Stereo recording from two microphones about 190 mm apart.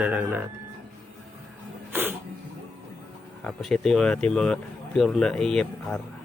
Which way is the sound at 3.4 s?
Centre (ahead or behind).